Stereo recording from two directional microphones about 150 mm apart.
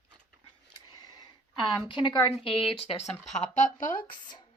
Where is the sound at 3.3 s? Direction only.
55° left (ahead or behind).